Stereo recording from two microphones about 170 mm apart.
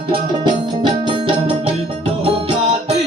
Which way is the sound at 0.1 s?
30° right (ahead or behind).